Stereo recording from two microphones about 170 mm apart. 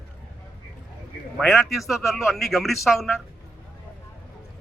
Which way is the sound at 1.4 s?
Centre (ahead or behind).